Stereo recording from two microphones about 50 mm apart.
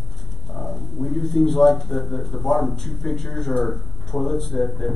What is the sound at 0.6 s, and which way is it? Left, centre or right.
Speech, left.